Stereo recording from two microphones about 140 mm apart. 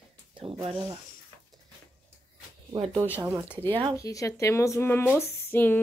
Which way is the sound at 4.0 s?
25° left (ahead or behind).